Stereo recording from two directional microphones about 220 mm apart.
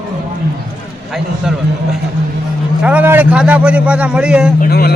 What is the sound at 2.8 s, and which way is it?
A man's voice, 5° right (ahead or behind).